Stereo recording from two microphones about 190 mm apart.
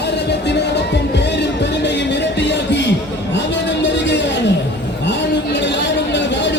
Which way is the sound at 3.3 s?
70° left (ahead or behind).